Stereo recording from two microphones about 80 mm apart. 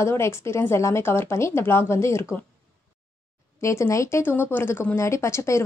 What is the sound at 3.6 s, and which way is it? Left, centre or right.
Speech, left.